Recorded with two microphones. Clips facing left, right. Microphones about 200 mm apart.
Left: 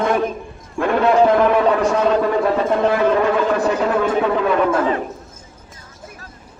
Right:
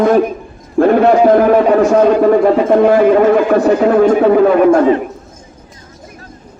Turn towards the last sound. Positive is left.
turn(degrees=-45)  # may be behind; listen again after turning